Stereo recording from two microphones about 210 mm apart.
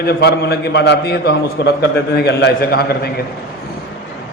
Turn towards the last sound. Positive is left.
turn(degrees=50)  # may be behind; listen again after turning